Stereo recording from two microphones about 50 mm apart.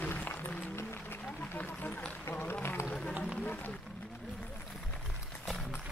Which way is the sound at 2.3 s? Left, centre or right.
Left.